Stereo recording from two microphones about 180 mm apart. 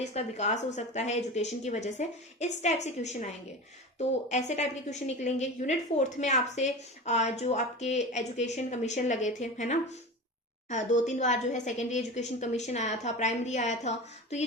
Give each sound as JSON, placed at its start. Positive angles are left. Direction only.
{"t": 0.0, "sound": "a woman's voice", "side_deg": 40}